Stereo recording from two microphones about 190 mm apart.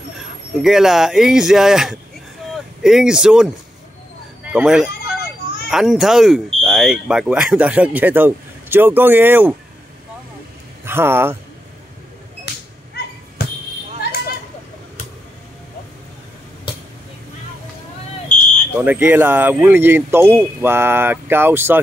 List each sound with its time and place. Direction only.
0.6 s speech: centre (ahead or behind)
4.5 s fowl: 5° right (ahead or behind)
5.7 s speech: centre (ahead or behind)
10.9 s speech: 10° right (ahead or behind)
12.5 s a sound: 60° left (ahead or behind)
18.8 s speech: 10° right (ahead or behind)